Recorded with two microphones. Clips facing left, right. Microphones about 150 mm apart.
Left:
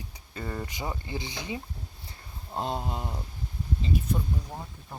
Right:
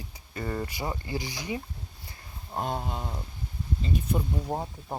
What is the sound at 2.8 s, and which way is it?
Speech, 10° left (ahead or behind).